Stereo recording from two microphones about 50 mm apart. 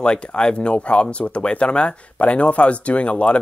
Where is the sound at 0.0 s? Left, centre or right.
Centre.